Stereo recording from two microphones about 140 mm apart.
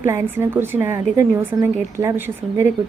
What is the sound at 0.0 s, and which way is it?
A woman's voice, 20° right (ahead or behind).